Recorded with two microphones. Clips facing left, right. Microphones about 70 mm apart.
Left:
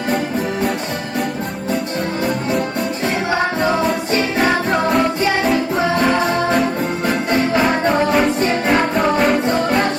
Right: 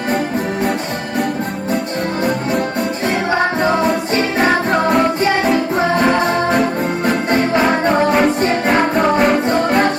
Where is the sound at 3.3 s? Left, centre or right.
Centre.